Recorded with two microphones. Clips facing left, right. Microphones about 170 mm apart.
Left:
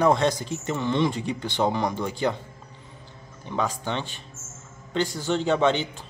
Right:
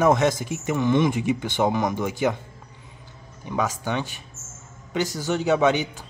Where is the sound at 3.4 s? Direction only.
10° right (ahead or behind).